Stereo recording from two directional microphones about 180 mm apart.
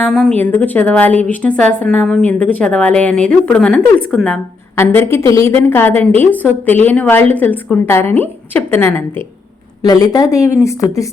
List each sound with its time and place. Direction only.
0.0 s a woman's voice: 5° left (ahead or behind)
4.7 s a woman's voice: 15° left (ahead or behind)